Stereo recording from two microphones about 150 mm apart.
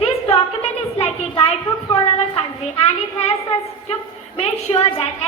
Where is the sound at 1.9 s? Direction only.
40° left (ahead or behind).